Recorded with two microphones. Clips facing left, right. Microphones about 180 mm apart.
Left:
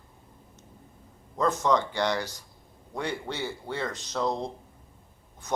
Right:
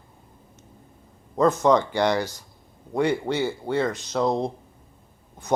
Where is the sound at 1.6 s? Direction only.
55° right (ahead or behind).